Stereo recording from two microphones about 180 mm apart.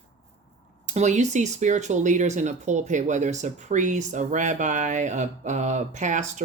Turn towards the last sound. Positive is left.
turn(degrees=-40)  # may be behind; listen again after turning